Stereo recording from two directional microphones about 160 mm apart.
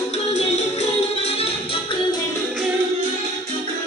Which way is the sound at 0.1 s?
45° left (ahead or behind).